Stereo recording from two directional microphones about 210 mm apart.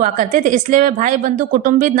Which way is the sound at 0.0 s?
40° right (ahead or behind).